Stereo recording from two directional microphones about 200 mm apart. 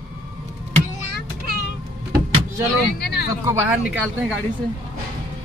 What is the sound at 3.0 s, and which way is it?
Speech, 55° left (ahead or behind).